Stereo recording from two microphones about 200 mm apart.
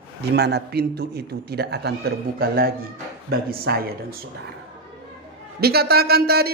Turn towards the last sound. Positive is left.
turn(degrees=-50)  # may be behind; listen again after turning